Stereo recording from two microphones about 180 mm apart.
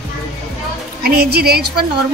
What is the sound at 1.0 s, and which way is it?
Speech, 60° right (ahead or behind).